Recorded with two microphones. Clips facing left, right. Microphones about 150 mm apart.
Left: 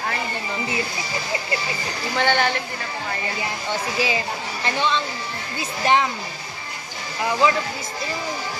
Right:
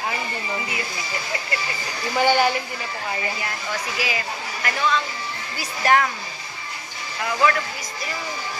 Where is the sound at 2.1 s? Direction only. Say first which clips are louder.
Right 2 dB; 10° right (ahead or behind).